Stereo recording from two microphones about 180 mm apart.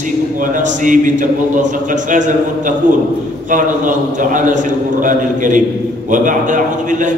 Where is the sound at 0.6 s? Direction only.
45° right (ahead or behind).